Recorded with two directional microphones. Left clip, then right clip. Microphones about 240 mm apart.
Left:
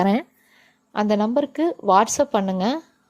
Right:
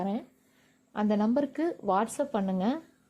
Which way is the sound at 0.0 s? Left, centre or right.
Left.